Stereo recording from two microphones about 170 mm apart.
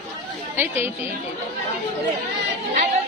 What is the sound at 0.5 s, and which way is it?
Speech, 10° right (ahead or behind).